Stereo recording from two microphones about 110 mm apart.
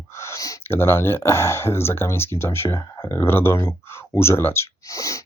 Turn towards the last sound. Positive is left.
turn(degrees=30)  # may be behind; listen again after turning